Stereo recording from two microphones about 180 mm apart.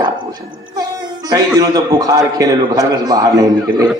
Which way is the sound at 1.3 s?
20° right (ahead or behind).